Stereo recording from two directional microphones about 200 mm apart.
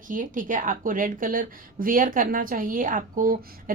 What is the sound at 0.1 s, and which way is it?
A woman's voice, 40° right (ahead or behind).